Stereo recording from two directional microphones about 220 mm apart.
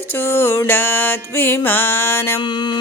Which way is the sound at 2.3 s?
20° left (ahead or behind).